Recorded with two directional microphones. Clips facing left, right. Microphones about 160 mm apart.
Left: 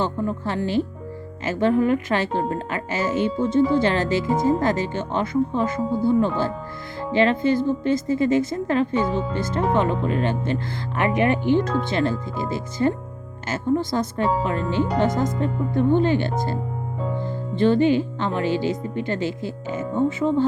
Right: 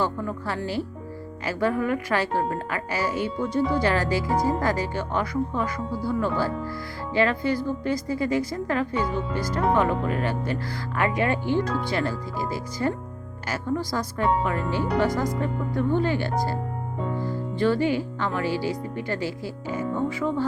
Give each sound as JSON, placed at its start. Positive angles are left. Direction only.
{"t": 0.0, "sound": "speech", "side_deg": 20}